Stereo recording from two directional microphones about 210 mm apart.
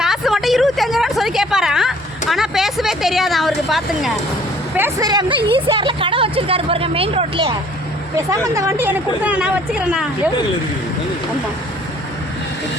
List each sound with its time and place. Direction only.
0.0 s a sound: centre (ahead or behind)
4.8 s speech: 15° right (ahead or behind)
8.4 s speech: 15° right (ahead or behind)